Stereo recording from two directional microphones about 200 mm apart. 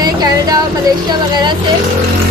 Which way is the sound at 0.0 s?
20° right (ahead or behind).